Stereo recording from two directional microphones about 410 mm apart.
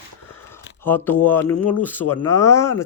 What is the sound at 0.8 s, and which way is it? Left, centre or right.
Speech, centre.